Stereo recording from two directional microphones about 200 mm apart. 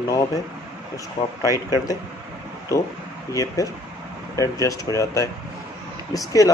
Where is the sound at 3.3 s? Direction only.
15° left (ahead or behind).